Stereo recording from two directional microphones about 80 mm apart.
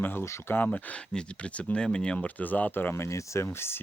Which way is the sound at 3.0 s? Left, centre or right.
Left.